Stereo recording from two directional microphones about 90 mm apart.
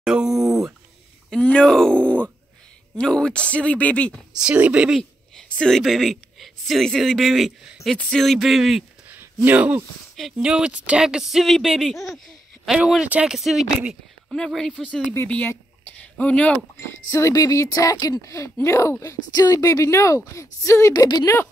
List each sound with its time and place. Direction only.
0.0 s speech: 10° right (ahead or behind)
1.3 s speech: 10° left (ahead or behind)
4.4 s speech: 10° right (ahead or behind)
4.9 s a woman's voice: 5° left (ahead or behind)
9.1 s a sound: 20° right (ahead or behind)
10.3 s speech: 10° right (ahead or behind); by 15.5 s 15° left (ahead or behind)
15.8 s a sound: 15° left (ahead or behind)
16.8 s a woman's voice: 30° left (ahead or behind)
20.9 s speech: 45° left (ahead or behind)